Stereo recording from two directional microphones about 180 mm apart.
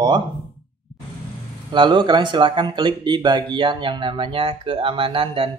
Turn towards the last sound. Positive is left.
turn(degrees=-30)  # may be behind; listen again after turning